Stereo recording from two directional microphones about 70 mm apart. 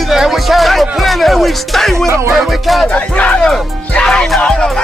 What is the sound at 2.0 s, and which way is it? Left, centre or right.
Music, right.